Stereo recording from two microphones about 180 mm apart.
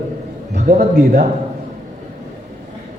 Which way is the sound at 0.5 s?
55° right (ahead or behind).